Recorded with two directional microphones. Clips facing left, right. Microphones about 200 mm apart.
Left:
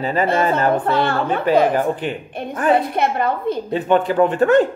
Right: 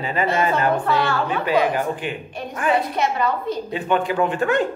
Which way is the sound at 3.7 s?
40° left (ahead or behind).